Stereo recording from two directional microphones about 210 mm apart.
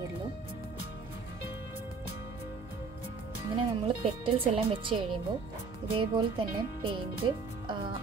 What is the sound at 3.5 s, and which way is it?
Speech, 25° right (ahead or behind).